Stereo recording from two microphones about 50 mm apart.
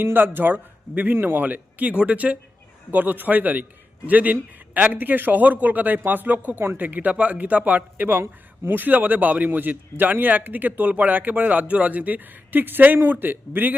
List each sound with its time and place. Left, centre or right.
0.0 s a man's voice: right
8.1 s speech: right
8.7 s a man's voice: right